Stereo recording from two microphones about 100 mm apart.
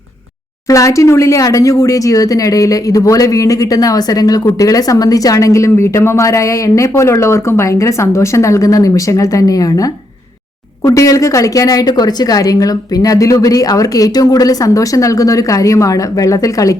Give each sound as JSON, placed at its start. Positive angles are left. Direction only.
{"t": 0.7, "sound": "a woman's voice", "side_deg": 30}